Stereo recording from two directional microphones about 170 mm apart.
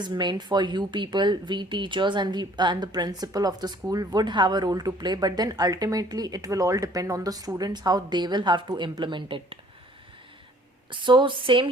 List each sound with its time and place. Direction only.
0.0 s a woman's voice: 25° right (ahead or behind)
11.0 s a woman's voice: 25° right (ahead or behind)